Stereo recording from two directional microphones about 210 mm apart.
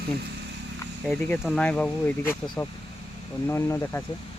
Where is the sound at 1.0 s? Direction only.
Centre (ahead or behind).